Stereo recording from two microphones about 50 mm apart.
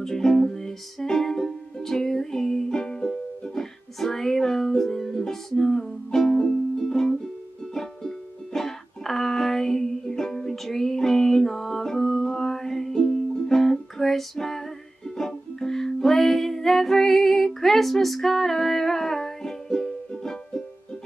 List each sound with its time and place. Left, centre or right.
0.0 s music: centre